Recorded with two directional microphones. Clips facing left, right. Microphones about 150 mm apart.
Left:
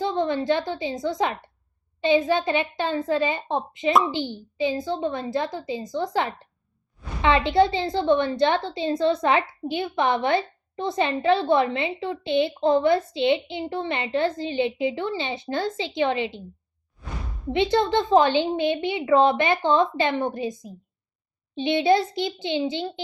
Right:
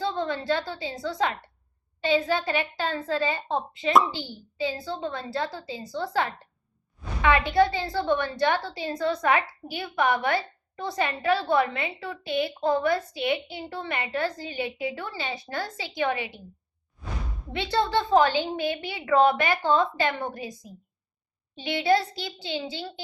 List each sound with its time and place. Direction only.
0.0 s a woman's voice: 20° left (ahead or behind)
17.5 s a woman's voice: 20° left (ahead or behind)